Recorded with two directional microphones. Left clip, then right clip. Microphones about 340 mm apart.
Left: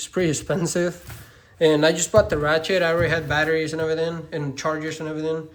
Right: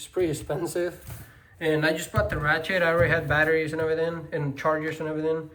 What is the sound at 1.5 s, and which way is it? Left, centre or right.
Speech, centre.